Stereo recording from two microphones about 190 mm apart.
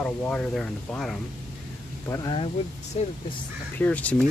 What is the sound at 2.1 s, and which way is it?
Speech, 20° left (ahead or behind).